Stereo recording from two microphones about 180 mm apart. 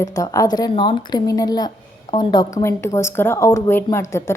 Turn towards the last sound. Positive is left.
turn(degrees=15)  # may be behind; listen again after turning